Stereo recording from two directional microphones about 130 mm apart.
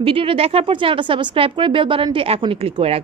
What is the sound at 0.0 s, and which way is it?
Speech, 45° right (ahead or behind).